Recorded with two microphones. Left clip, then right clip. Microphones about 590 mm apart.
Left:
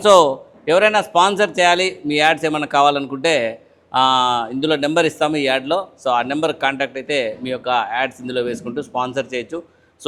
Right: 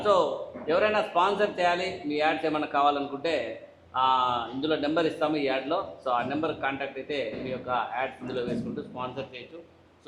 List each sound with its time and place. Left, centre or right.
0.7 s a man's voice: left